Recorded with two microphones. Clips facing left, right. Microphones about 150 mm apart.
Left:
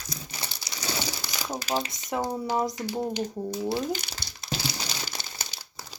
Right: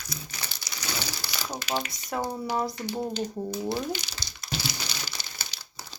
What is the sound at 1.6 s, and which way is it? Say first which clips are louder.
Speech: left 2 dB; 40° left (ahead or behind).